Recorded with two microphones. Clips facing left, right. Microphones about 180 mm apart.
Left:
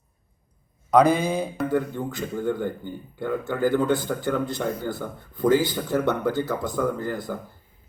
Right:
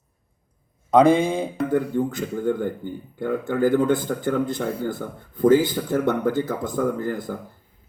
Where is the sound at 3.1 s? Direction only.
50° right (ahead or behind).